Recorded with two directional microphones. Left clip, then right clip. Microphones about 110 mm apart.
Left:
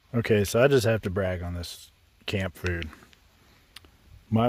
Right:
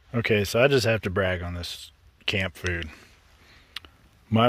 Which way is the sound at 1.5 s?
40° left (ahead or behind).